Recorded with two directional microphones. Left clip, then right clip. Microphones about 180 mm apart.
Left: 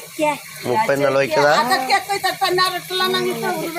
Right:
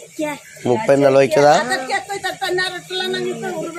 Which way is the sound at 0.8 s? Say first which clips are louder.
Right 5 dB; 75° right (ahead or behind).